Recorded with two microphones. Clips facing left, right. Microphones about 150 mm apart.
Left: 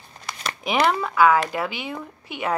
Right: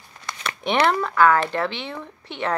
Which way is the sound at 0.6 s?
5° left (ahead or behind).